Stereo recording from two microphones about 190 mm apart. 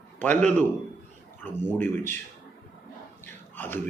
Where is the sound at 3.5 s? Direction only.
10° left (ahead or behind).